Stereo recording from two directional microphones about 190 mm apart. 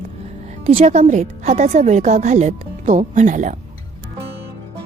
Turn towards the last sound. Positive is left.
turn(degrees=-40)  # may be behind; listen again after turning